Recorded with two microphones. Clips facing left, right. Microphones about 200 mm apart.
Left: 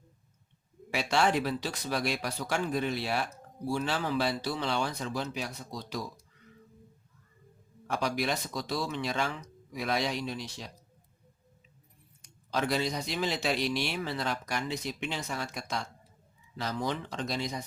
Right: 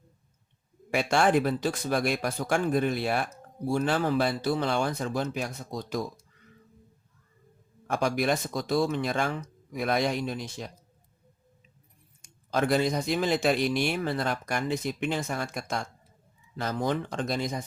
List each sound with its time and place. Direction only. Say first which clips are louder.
0.9 s a man's voice: right 4 dB; 50° right (ahead or behind)
7.9 s a man's voice: right 5 dB; 50° right (ahead or behind)
12.5 s a man's voice: right 5 dB; 50° right (ahead or behind)